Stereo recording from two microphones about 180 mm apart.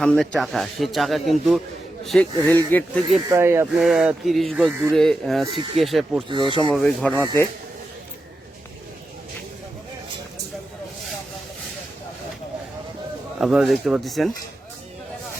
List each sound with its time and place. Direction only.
0.0 s speech: centre (ahead or behind)
3.2 s speech: 15° right (ahead or behind)
3.7 s speech: centre (ahead or behind)
5.5 s speech: 30° right (ahead or behind)
5.8 s speech: centre (ahead or behind)
6.2 s speech: 25° right (ahead or behind)
6.7 s speech: 5° left (ahead or behind)
13.4 s speech: centre (ahead or behind)